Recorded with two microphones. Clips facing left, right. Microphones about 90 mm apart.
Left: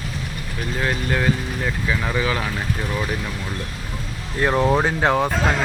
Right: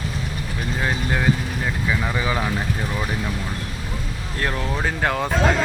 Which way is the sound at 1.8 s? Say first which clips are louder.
Left 1 dB; 5° right (ahead or behind).